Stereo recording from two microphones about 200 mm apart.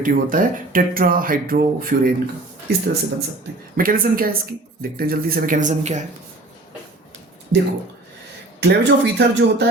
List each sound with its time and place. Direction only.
0.0 s speech: 45° right (ahead or behind)
8.6 s speech: 60° right (ahead or behind)